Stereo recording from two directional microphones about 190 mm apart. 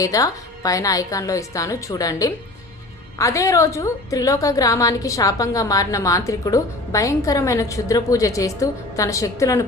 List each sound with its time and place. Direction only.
0.0 s a woman's voice: 20° left (ahead or behind)